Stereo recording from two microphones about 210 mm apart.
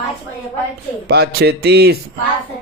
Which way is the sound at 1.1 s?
50° right (ahead or behind).